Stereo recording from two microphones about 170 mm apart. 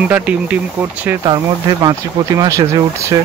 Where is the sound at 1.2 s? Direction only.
20° right (ahead or behind).